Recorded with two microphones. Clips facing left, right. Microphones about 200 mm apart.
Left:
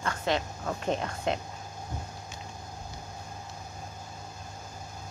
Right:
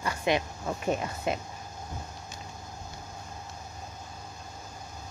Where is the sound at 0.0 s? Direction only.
10° right (ahead or behind).